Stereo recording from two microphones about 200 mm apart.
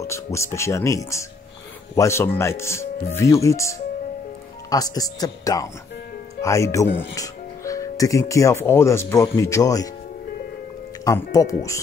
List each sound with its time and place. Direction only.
0.0 s speech: 15° left (ahead or behind)
11.1 s speech: 15° left (ahead or behind)